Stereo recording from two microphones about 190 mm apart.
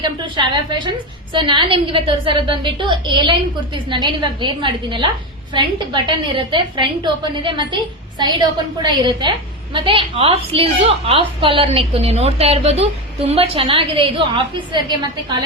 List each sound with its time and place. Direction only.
0.0 s a woman's voice: 25° right (ahead or behind)